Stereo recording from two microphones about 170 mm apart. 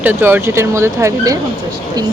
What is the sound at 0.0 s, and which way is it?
Speech, 10° right (ahead or behind).